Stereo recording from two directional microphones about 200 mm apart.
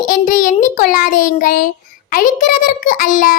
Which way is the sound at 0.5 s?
40° left (ahead or behind).